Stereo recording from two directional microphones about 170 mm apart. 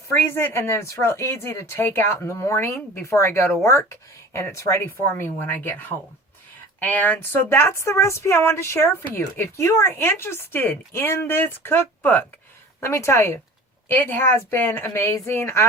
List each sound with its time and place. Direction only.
0.3 s speech: 15° left (ahead or behind)